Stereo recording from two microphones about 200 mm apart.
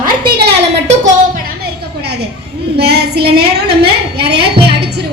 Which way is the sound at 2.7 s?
55° right (ahead or behind).